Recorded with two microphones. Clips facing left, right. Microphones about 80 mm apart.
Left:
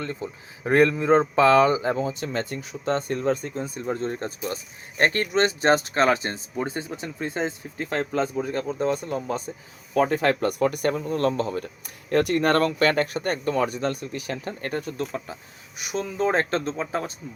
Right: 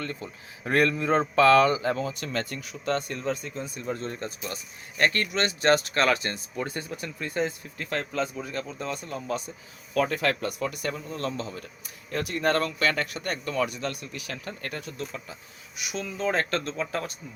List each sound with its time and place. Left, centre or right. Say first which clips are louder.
0.0 s speech: left 4 dB; left